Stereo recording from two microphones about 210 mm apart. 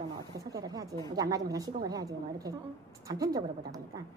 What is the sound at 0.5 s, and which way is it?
Speech, 15° right (ahead or behind).